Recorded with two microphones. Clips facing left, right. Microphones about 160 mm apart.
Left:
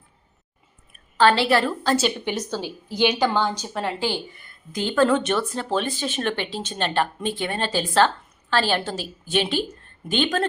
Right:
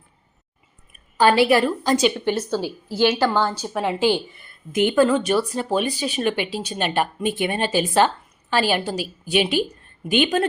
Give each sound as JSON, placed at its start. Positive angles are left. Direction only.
{"t": 1.1, "sound": "a woman's voice", "side_deg": -10}
{"t": 2.2, "sound": "a woman's voice", "side_deg": 10}
{"t": 3.4, "sound": "speech", "side_deg": -5}
{"t": 5.0, "sound": "speech", "side_deg": -5}